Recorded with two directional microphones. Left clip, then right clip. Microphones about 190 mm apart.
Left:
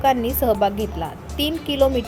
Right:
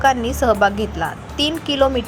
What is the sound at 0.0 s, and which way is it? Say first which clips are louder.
Speech: right 3 dB; 15° left (ahead or behind).